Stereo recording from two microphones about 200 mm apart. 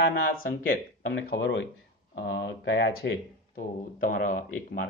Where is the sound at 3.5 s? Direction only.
45° left (ahead or behind).